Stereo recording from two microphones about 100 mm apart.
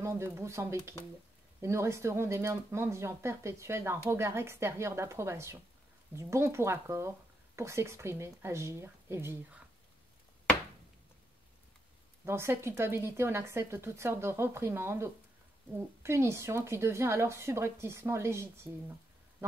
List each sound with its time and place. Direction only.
0.0 s speech: 25° right (ahead or behind)
12.3 s speech: 25° right (ahead or behind)